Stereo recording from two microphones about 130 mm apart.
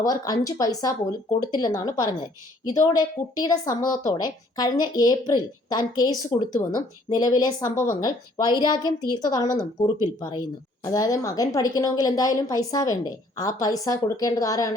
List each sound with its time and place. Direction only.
0.0 s a woman's voice: 30° left (ahead or behind)